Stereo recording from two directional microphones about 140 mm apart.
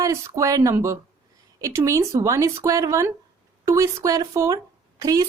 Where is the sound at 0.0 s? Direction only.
25° right (ahead or behind).